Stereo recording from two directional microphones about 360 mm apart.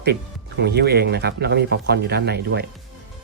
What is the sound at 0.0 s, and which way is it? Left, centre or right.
Speech, right.